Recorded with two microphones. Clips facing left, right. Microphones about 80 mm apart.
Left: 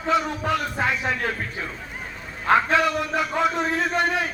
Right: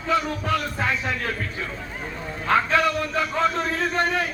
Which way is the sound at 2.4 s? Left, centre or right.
Centre.